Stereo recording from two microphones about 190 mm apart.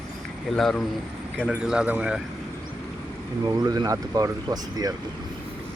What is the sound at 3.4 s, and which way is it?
Speech, 20° right (ahead or behind).